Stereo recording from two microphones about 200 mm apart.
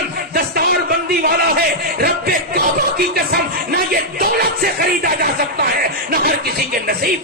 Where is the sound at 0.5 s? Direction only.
50° right (ahead or behind).